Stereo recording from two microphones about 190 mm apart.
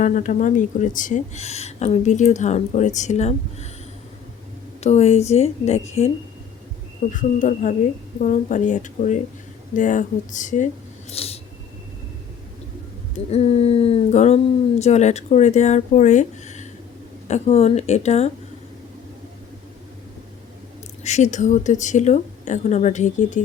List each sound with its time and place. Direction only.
0.0 s speech: 45° left (ahead or behind)
4.8 s speech: 35° left (ahead or behind)
7.1 s speech: 45° left (ahead or behind)
11.1 s snort: 30° left (ahead or behind)
13.3 s speech: 35° left (ahead or behind)
21.0 s speech: 35° left (ahead or behind)